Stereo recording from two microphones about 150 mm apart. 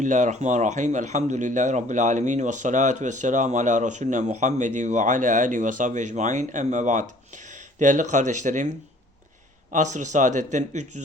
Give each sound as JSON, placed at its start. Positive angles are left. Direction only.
{"t": 0.0, "sound": "speech", "side_deg": -55}
{"t": 9.7, "sound": "speech", "side_deg": -55}